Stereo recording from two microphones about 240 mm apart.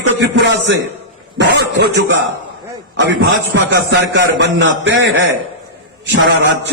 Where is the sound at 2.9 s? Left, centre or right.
Right.